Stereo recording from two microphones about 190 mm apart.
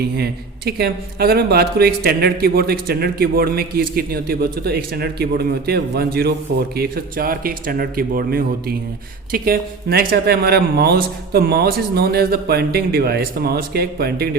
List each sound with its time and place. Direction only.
0.0 s speech: 55° right (ahead or behind)